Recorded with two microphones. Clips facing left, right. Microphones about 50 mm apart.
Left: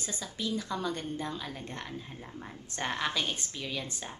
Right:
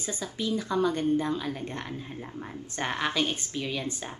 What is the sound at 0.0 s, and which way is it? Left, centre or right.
Speech, centre.